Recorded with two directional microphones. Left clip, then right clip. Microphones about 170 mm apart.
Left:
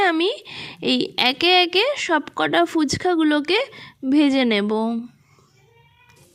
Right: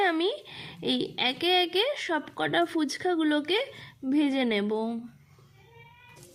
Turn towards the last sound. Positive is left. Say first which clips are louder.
# left 7 dB
turn(degrees=40)  # may be behind; listen again after turning